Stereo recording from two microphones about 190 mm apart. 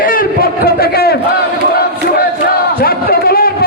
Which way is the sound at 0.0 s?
50° left (ahead or behind).